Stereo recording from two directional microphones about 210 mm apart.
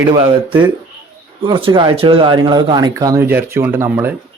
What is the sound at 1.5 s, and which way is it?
Speech, 25° right (ahead or behind).